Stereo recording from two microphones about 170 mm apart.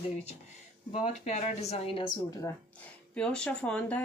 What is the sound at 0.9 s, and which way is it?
A woman's voice, 40° left (ahead or behind).